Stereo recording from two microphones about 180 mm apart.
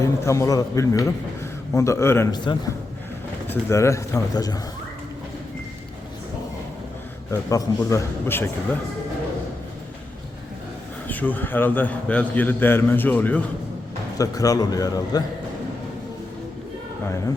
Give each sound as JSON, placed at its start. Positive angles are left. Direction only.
{"t": 0.0, "sound": "a man's voice", "side_deg": 15}
{"t": 7.3, "sound": "a man's voice", "side_deg": 15}
{"t": 11.1, "sound": "a man's voice", "side_deg": 10}